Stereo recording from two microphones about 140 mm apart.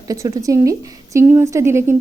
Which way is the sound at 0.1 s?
25° right (ahead or behind).